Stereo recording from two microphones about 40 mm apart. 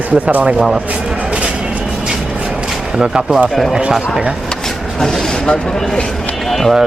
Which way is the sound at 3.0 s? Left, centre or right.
Right.